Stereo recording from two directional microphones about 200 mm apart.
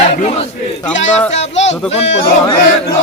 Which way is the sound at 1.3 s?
35° left (ahead or behind).